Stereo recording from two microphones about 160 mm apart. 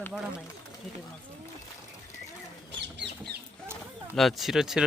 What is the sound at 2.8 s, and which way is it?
Chicken, 90° right.